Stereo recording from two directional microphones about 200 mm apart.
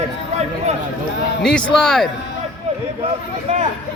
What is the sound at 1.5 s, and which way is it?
Speech, 5° left (ahead or behind).